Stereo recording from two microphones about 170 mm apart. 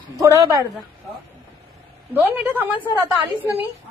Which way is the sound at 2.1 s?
10° right (ahead or behind).